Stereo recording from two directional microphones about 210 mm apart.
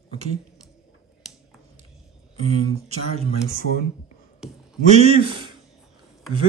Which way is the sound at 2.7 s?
30° right (ahead or behind).